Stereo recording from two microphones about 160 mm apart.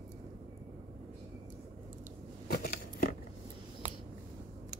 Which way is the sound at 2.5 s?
70° left (ahead or behind).